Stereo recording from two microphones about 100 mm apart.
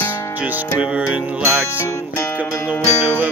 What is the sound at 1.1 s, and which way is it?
Music, 15° right (ahead or behind).